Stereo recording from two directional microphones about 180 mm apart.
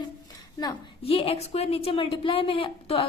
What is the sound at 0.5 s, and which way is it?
A woman's voice, 25° left (ahead or behind).